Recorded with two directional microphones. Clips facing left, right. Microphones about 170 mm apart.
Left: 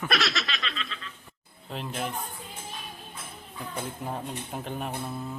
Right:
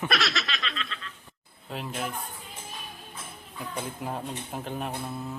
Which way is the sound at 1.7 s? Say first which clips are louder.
Even; centre (ahead or behind).